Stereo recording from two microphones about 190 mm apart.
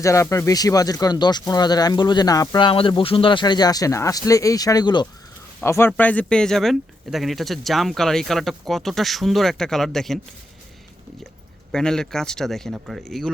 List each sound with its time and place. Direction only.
0.0 s speech: 15° left (ahead or behind)
11.7 s speech: 5° left (ahead or behind)